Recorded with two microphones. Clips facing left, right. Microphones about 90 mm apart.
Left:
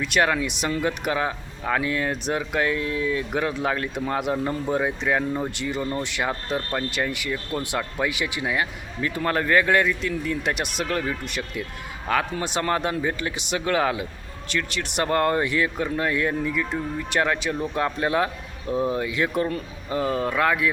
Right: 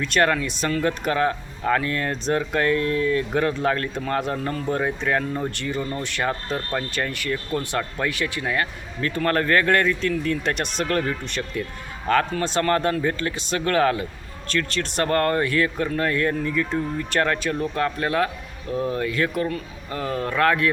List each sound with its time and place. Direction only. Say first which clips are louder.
0.0 s speech: right 1 dB; 10° left (ahead or behind); by 19.6 s 30° left (ahead or behind)
19.9 s speech: left 2 dB; 20° left (ahead or behind)